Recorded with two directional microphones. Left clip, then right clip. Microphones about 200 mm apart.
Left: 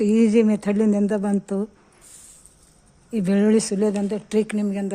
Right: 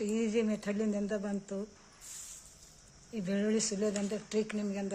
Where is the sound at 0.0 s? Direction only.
55° left (ahead or behind).